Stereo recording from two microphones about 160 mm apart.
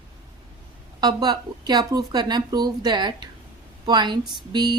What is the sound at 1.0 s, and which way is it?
A woman's voice, 25° right (ahead or behind).